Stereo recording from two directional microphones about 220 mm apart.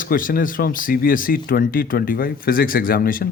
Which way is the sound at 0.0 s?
40° left (ahead or behind).